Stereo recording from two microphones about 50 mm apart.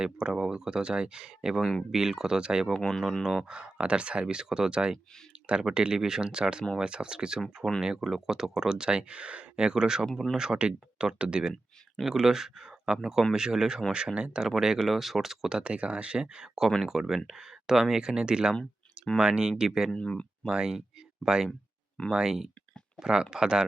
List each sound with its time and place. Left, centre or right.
0.0 s speech: centre
2.7 s speech: centre
3.5 s speech: centre
15.5 s speech: right
19.9 s speech: left
20.5 s speech: centre